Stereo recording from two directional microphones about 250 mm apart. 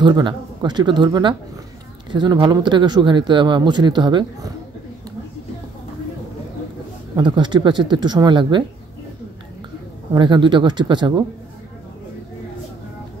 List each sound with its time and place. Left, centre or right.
0.0 s speech: centre
7.2 s speech: centre
10.1 s speech: centre